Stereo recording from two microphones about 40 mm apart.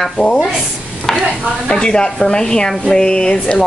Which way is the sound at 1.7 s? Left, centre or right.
Left.